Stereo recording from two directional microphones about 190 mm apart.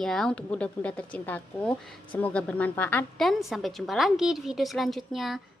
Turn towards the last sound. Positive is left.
turn(degrees=0)  # may be behind; listen again after turning